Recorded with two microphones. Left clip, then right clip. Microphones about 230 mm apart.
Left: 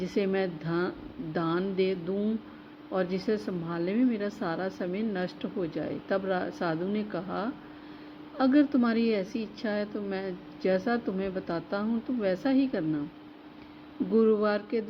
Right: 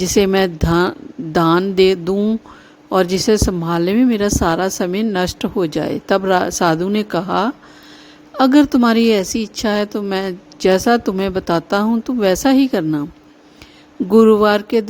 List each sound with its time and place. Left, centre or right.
0.0 s speech: right
14.1 s speech: right